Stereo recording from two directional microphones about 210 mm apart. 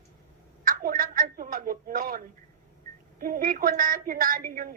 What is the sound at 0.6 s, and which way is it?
A woman's voice, 40° right (ahead or behind).